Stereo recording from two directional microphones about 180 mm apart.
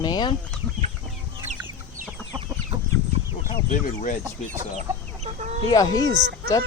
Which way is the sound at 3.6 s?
45° left (ahead or behind).